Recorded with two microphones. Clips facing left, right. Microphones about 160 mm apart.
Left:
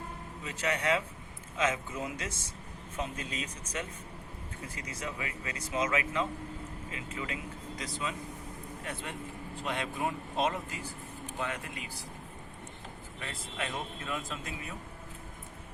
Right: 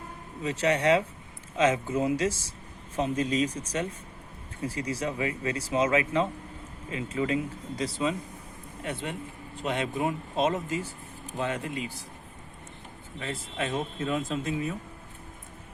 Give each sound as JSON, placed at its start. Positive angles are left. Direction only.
{"t": 0.4, "sound": "speech", "side_deg": -30}
{"t": 4.7, "sound": "speech", "side_deg": -30}
{"t": 13.1, "sound": "speech", "side_deg": -25}